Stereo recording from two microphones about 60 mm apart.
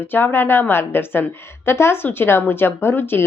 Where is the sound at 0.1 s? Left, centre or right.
Left.